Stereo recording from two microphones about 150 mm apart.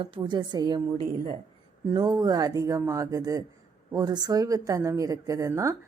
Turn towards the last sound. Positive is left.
turn(degrees=-20)  # may be behind; listen again after turning